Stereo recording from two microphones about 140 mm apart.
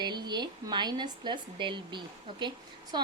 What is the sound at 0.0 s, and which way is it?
A woman's voice, 30° right (ahead or behind).